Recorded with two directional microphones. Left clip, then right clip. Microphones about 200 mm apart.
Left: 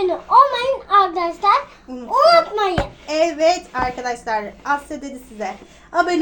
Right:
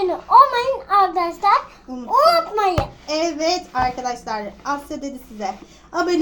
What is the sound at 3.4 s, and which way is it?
Speech, 15° left (ahead or behind).